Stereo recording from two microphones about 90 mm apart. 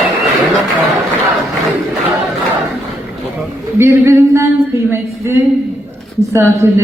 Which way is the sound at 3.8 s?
30° right (ahead or behind).